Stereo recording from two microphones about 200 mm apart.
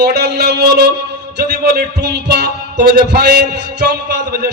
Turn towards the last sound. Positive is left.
turn(degrees=-55)  # may be behind; listen again after turning